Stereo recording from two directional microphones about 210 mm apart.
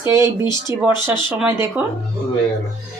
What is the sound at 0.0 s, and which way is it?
Speech, 15° right (ahead or behind).